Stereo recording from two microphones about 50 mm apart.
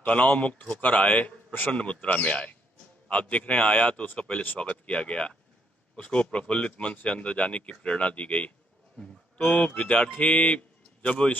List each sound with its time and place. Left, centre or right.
0.0 s speech: left
9.0 s a sound: left
9.7 s speech: left